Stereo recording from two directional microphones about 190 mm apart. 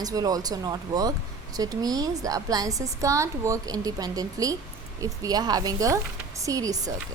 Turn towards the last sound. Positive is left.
turn(degrees=-20)  # may be behind; listen again after turning